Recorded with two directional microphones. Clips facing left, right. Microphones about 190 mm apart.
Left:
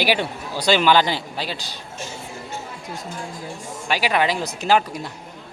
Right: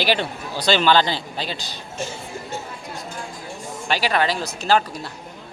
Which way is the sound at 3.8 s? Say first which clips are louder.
Even; 10° left (ahead or behind).